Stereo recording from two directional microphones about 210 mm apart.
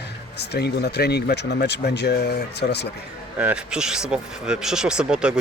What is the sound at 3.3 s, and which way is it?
Speech, 5° right (ahead or behind).